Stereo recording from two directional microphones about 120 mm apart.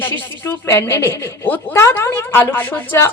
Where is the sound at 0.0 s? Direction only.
15° left (ahead or behind).